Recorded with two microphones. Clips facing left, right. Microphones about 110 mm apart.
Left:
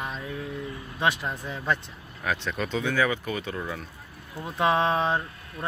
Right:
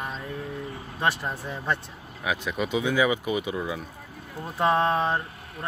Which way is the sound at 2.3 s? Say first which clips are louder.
Right 1 dB; 10° right (ahead or behind).